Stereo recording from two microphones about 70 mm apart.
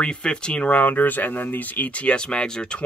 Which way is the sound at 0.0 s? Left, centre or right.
Centre.